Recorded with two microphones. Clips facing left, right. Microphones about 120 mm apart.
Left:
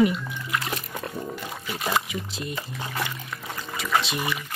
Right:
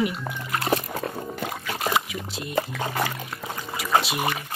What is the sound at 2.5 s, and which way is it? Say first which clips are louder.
Speech: right 7 dB; 60° right (ahead or behind).